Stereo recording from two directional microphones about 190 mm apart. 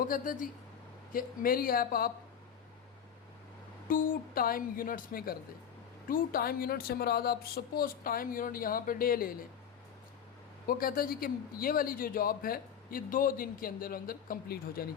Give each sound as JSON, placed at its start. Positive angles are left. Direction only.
{"t": 0.0, "sound": "a man's voice", "side_deg": 45}
{"t": 3.8, "sound": "a man's voice", "side_deg": 45}
{"t": 10.7, "sound": "a man's voice", "side_deg": 50}